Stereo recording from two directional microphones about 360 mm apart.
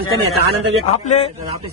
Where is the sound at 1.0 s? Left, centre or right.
Centre.